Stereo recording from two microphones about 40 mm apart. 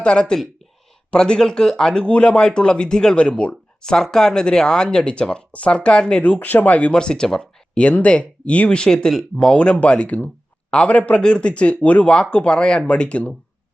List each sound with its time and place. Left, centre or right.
0.0 s speech: left
3.8 s speech: centre
6.2 s speech: left
7.0 s speech: centre
7.8 s speech: left
8.8 s speech: centre; by 12.1 s left
12.1 s speech: left